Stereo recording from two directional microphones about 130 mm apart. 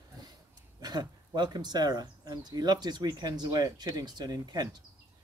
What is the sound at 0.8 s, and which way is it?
Speech, 30° right (ahead or behind).